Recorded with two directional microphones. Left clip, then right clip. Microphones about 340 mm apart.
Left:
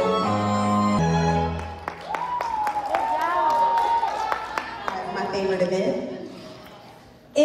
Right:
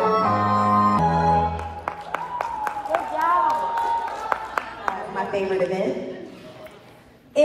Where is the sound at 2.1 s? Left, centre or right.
Right.